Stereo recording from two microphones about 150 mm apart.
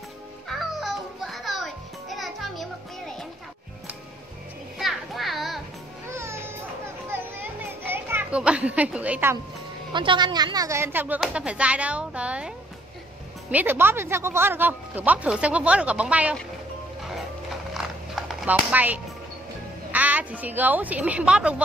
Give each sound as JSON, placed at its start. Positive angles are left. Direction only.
{"t": 0.5, "sound": "music", "side_deg": 0}
{"t": 4.7, "sound": "music", "side_deg": 0}
{"t": 6.0, "sound": "music", "side_deg": -15}
{"t": 7.8, "sound": "a child's voice", "side_deg": -15}
{"t": 9.9, "sound": "speech", "side_deg": -30}
{"t": 17.7, "sound": "music", "side_deg": -5}
{"t": 19.9, "sound": "speech", "side_deg": -10}